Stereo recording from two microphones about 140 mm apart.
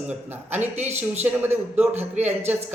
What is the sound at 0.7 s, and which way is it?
Speech, 55° right (ahead or behind).